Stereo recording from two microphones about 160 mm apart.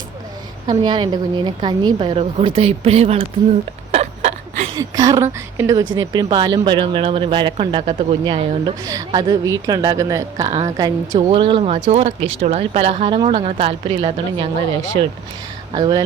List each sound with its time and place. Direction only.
0.7 s speech: 30° right (ahead or behind)
3.9 s a sound: 45° right (ahead or behind)
4.7 s speech: 25° right (ahead or behind); by 15.1 s 40° right (ahead or behind)
15.7 s speech: 30° right (ahead or behind)